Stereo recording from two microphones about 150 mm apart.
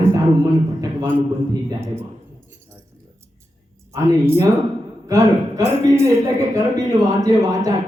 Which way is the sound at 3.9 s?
20° right (ahead or behind).